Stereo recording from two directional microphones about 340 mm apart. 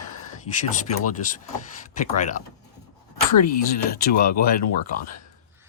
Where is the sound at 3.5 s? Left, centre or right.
Left.